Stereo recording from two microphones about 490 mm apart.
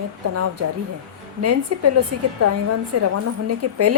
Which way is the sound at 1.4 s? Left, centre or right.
Right.